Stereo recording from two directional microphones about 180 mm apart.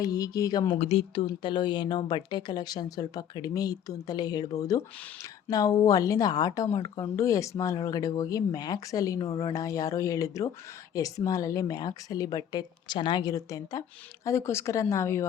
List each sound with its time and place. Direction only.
0.0 s a woman's voice: 20° left (ahead or behind)
0.8 s a woman's voice: 35° left (ahead or behind); by 15.3 s 15° left (ahead or behind)